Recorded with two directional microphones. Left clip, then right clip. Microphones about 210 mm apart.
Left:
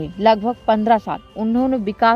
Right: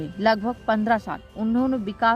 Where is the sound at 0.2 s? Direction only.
20° left (ahead or behind).